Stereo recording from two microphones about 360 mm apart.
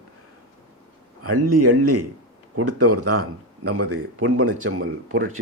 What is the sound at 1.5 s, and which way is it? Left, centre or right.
Speech, right.